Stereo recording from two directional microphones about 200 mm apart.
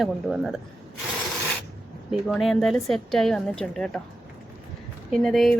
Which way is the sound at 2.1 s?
Centre (ahead or behind).